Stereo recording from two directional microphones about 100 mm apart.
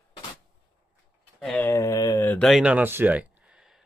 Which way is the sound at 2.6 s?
15° right (ahead or behind).